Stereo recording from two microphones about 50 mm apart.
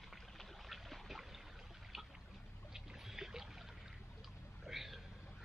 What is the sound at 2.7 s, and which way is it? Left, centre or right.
Boat, centre.